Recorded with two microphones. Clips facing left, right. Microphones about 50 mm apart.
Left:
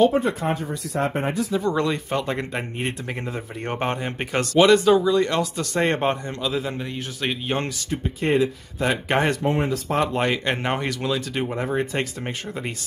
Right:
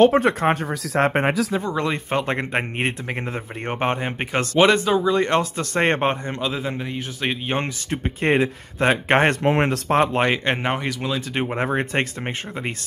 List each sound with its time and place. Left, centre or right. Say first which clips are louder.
0.0 s speech: right 4 dB; right
1.6 s speech: left 2 dB; centre
1.9 s speech: right 2 dB; right
3.1 s a man's voice: right 2 dB; right
4.8 s speech: left 2 dB; centre
5.1 s a man's voice: right 1 dB; right
7.9 s speech: right 2 dB; right
9.4 s speech: right 3 dB; right
9.8 s speech: right 4 dB; right
10.7 s speech: even; centre
11.1 s a man's voice: right 1 dB; right
11.5 s speech: right 3 dB; right